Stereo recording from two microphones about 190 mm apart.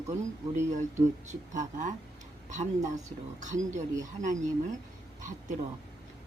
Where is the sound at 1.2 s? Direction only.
40° right (ahead or behind).